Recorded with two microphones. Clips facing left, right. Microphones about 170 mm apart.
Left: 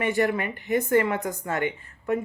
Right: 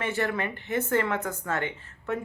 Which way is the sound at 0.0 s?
15° left (ahead or behind).